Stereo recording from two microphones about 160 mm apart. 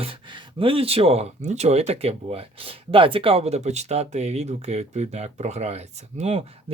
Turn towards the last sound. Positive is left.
turn(degrees=-40)  # may be behind; listen again after turning